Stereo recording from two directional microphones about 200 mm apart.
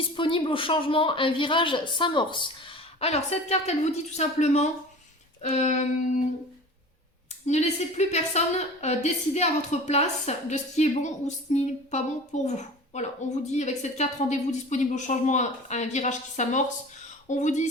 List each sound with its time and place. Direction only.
0.1 s speech: 25° left (ahead or behind)
7.4 s speech: 35° left (ahead or behind)